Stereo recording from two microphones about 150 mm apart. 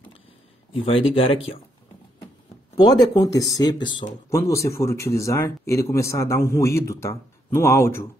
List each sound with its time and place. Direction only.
0.7 s speech: 35° left (ahead or behind)
2.8 s speech: 25° left (ahead or behind)